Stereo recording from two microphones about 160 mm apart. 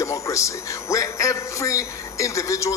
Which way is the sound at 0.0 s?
20° left (ahead or behind).